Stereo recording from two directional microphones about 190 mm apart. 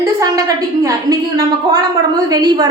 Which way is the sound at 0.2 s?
20° right (ahead or behind).